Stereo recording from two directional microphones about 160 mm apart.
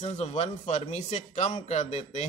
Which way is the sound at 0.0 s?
45° left (ahead or behind).